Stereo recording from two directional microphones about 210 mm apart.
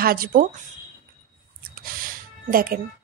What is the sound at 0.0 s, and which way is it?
Speech, 45° right (ahead or behind).